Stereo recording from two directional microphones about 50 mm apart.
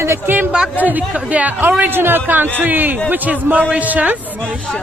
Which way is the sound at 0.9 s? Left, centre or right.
Right.